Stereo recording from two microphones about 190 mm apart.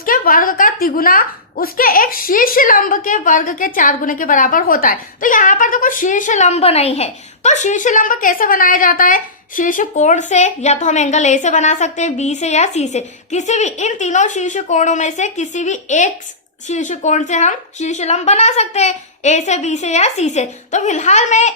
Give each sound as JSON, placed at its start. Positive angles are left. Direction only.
{"t": 0.0, "sound": "a woman's voice", "side_deg": 45}